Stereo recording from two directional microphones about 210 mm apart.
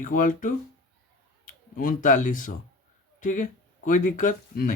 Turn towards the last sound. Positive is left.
turn(degrees=40)  # may be behind; listen again after turning